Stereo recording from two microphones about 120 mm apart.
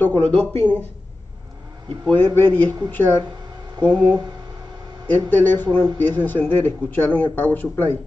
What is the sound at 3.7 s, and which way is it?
Speech, 40° right (ahead or behind).